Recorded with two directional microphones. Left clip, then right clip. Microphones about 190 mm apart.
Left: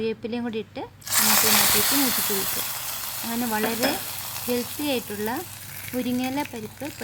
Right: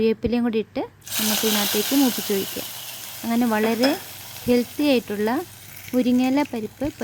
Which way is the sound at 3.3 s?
30° right (ahead or behind).